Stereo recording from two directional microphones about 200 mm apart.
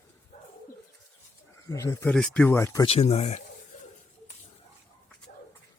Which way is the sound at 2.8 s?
30° left (ahead or behind).